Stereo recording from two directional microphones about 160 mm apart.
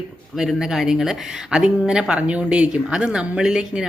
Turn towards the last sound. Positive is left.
turn(degrees=-5)  # may be behind; listen again after turning